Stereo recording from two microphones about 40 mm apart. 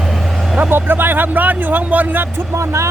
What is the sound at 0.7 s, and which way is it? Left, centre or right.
Speech, right.